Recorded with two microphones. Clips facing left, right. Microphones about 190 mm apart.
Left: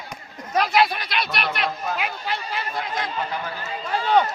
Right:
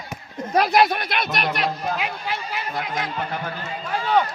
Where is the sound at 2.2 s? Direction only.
15° right (ahead or behind).